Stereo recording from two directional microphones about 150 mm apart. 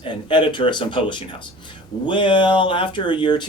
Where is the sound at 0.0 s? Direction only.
30° left (ahead or behind).